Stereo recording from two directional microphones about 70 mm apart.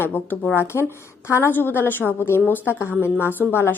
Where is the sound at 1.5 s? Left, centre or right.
Left.